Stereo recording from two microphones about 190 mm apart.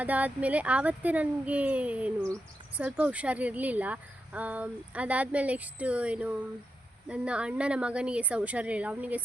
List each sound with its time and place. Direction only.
0.0 s speech: 10° right (ahead or behind)